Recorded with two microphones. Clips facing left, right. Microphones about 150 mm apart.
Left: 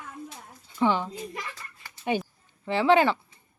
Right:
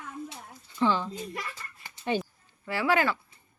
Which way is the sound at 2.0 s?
10° left (ahead or behind).